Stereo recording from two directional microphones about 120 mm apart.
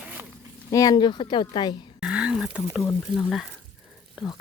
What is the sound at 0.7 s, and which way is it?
Speech, 30° left (ahead or behind).